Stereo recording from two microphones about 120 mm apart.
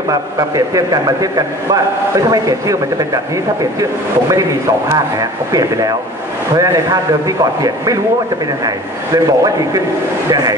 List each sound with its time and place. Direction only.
0.1 s a man's voice: 30° right (ahead or behind)
5.5 s a man's voice: 30° right (ahead or behind)